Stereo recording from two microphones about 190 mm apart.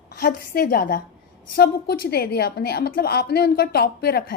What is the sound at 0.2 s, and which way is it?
A woman's voice, 55° left (ahead or behind).